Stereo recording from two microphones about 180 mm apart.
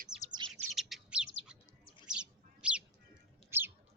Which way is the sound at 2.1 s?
5° right (ahead or behind).